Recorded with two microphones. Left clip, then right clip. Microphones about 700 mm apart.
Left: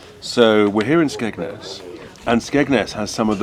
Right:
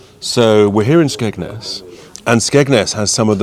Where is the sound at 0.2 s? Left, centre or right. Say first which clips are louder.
Right 3 dB; right.